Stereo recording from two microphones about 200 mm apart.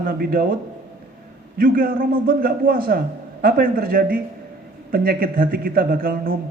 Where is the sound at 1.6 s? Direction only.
45° right (ahead or behind).